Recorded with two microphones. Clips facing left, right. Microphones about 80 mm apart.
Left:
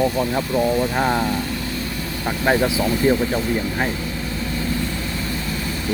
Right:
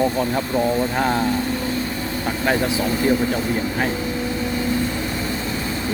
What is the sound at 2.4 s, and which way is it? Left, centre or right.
Speech, centre.